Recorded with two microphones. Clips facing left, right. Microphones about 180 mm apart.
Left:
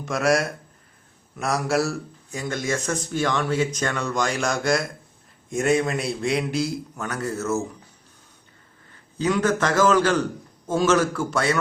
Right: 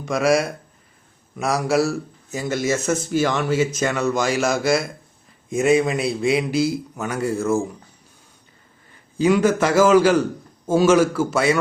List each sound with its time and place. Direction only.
0.0 s speech: centre (ahead or behind)
9.1 s a man's voice: 10° right (ahead or behind)